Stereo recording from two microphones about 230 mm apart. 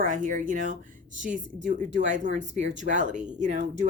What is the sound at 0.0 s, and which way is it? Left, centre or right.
A woman's voice, right.